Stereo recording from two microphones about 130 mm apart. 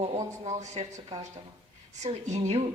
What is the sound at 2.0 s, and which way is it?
Speech, 60° right (ahead or behind).